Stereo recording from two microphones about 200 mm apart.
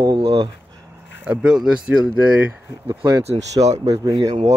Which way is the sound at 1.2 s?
5° right (ahead or behind).